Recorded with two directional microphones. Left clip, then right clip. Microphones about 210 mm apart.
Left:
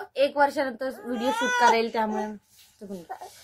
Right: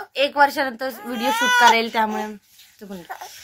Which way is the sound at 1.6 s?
5° right (ahead or behind).